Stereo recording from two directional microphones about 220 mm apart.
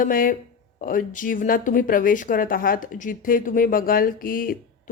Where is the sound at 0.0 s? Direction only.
40° left (ahead or behind).